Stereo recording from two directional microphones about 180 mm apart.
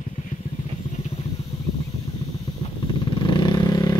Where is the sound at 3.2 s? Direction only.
25° left (ahead or behind).